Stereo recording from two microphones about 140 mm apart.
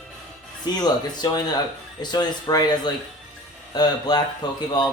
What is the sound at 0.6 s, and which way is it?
Speech, 30° left (ahead or behind).